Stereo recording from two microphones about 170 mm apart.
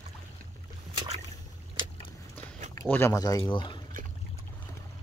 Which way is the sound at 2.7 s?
15° left (ahead or behind).